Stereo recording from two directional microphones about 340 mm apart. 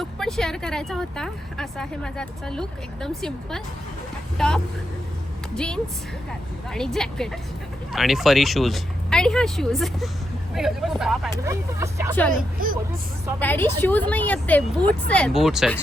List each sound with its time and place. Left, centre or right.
0.0 s speech: centre
12.3 s speech: right
13.4 s speech: centre